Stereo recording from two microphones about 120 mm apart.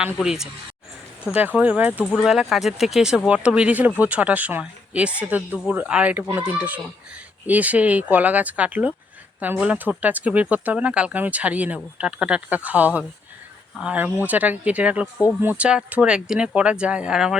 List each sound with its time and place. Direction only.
0.0 s speech: 5° right (ahead or behind)
1.5 s speech: 10° right (ahead or behind)